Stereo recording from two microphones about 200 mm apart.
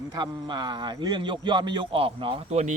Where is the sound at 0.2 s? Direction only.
20° right (ahead or behind).